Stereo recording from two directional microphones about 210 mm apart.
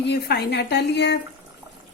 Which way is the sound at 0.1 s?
55° left (ahead or behind).